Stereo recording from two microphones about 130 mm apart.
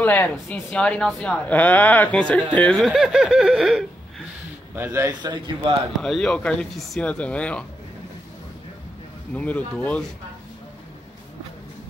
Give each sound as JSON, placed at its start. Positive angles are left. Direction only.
{"t": 0.0, "sound": "speech", "side_deg": 15}
{"t": 4.7, "sound": "a man's voice", "side_deg": -20}
{"t": 5.2, "sound": "a man's voice", "side_deg": -35}
{"t": 6.0, "sound": "speech", "side_deg": 5}
{"t": 9.3, "sound": "speech", "side_deg": 10}